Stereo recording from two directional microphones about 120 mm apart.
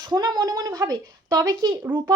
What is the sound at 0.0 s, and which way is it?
Speech, 35° right (ahead or behind).